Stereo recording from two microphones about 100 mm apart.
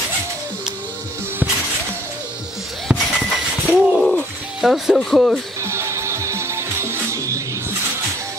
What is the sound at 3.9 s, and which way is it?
Music, 5° left (ahead or behind).